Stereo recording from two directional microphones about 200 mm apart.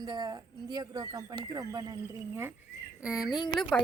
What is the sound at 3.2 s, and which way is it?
Speech, 20° left (ahead or behind).